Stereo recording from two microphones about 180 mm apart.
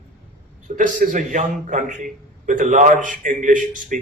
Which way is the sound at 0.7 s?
45° right (ahead or behind).